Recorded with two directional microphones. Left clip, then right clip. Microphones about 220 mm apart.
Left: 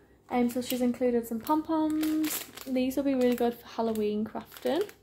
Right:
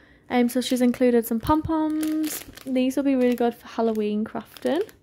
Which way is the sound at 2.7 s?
30° right (ahead or behind).